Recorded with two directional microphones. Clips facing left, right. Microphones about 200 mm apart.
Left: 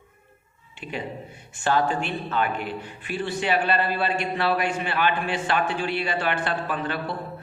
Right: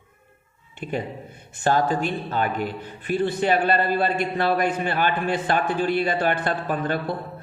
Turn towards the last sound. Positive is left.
turn(degrees=-45)  # may be behind; listen again after turning